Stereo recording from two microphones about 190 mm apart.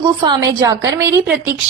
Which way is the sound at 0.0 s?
20° right (ahead or behind).